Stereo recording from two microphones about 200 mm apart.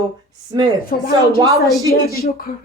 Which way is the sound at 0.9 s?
45° left (ahead or behind).